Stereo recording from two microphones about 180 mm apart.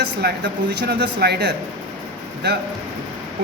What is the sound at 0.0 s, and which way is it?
Speech, 65° right (ahead or behind).